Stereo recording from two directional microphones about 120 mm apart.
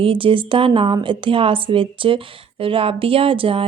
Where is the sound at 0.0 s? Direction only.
50° right (ahead or behind).